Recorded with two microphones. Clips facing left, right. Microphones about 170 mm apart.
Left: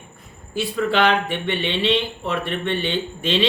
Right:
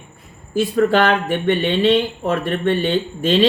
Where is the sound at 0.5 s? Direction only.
45° right (ahead or behind).